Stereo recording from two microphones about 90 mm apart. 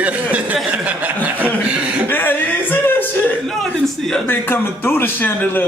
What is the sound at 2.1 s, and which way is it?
Speech, 20° left (ahead or behind).